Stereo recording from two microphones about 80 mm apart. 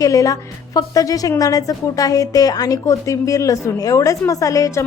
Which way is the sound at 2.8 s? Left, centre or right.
Left.